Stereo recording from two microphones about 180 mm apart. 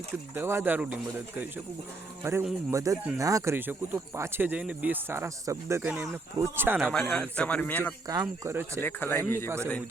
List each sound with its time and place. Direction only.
0.3 s speech: 10° right (ahead or behind)
2.2 s speech: 15° right (ahead or behind)
7.0 s a man's voice: 10° left (ahead or behind)
8.0 s speech: 20° right (ahead or behind)
8.8 s a man's voice: 10° left (ahead or behind)